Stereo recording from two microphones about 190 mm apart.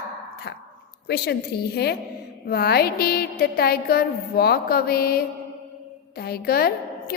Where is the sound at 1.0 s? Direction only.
60° left (ahead or behind).